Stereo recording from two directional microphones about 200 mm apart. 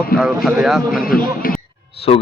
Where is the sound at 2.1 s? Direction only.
30° left (ahead or behind).